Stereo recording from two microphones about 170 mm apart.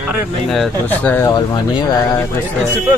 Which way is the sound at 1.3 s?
25° left (ahead or behind).